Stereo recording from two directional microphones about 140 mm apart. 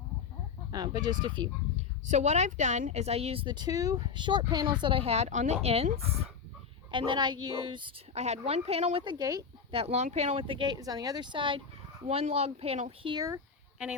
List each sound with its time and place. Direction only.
0.7 s speech: 30° right (ahead or behind)
2.0 s speech: 55° right (ahead or behind)
6.9 s speech: 35° right (ahead or behind)
8.1 s speech: 50° right (ahead or behind)
9.1 s speech: 25° right (ahead or behind)
9.7 s speech: 50° right (ahead or behind)
12.0 s speech: 45° right (ahead or behind)
13.1 s speech: 30° right (ahead or behind)
13.3 s a sound: 5° right (ahead or behind)